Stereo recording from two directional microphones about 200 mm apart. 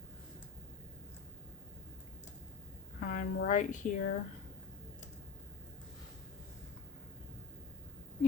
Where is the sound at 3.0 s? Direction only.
40° left (ahead or behind).